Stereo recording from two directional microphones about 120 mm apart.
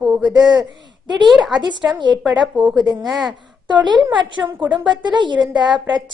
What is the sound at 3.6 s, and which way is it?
A woman's voice, 40° right (ahead or behind).